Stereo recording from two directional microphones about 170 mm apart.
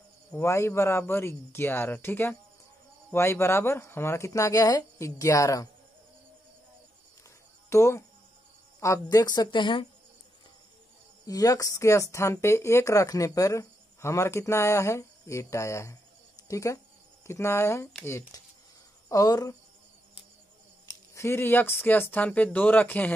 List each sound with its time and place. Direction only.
0.3 s speech: 15° left (ahead or behind)
7.7 s speech: 15° left (ahead or behind)
11.2 s speech: 20° left (ahead or behind)
20.8 s speech: 15° left (ahead or behind)